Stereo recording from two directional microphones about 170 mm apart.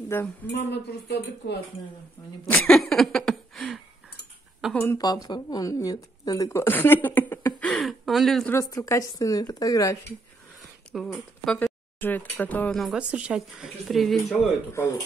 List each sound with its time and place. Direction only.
0.1 s speech: 15° left (ahead or behind)
0.5 s speech: 75° left (ahead or behind)
2.4 s speech: 5° left (ahead or behind)
4.6 s a sound: centre (ahead or behind)
4.8 s speech: 25° left (ahead or behind); by 8.5 s centre (ahead or behind)
8.5 s a woman's voice: 20° left (ahead or behind)
10.9 s speech: 5° left (ahead or behind)
14.7 s speech: 15° left (ahead or behind)